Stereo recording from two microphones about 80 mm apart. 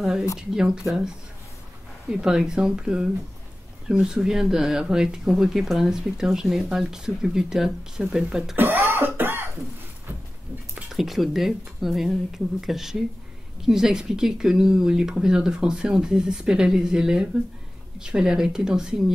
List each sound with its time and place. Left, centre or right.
0.0 s speech: centre
8.5 s throat clearing: right
10.7 s speech: centre